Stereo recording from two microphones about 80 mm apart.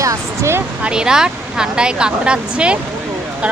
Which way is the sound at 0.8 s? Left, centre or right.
Centre.